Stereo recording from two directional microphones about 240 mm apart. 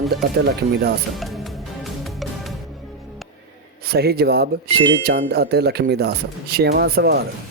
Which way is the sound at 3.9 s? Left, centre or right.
Right.